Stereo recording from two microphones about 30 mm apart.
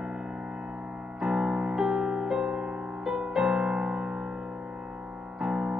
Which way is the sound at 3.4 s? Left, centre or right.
Right.